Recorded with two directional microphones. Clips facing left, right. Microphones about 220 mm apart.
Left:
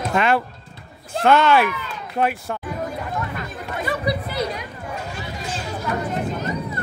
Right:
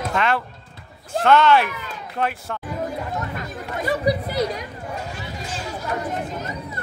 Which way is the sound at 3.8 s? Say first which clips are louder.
Right 3 dB; 40° right (ahead or behind).